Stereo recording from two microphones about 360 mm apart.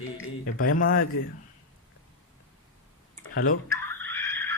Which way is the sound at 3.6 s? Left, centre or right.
Centre.